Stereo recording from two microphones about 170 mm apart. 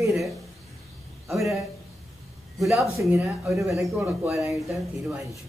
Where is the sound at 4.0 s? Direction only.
15° right (ahead or behind).